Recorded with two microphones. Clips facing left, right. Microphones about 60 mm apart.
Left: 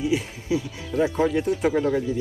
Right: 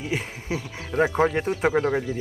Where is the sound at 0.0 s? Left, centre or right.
Right.